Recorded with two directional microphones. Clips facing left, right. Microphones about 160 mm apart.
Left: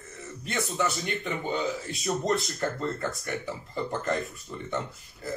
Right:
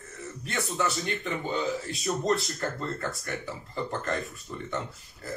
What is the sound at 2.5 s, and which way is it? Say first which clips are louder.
A man's voice: left 2 dB; 20° left (ahead or behind).